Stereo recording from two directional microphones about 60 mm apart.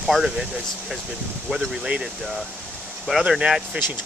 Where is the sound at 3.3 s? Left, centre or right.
Centre.